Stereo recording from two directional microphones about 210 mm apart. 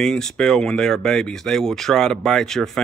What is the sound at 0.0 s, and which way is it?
A man's voice, centre (ahead or behind).